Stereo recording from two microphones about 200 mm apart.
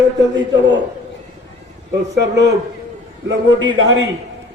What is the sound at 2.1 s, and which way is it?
Speech, 60° right (ahead or behind).